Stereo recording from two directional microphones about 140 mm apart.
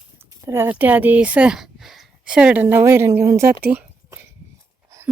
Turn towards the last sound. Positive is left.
turn(degrees=-10)  # may be behind; listen again after turning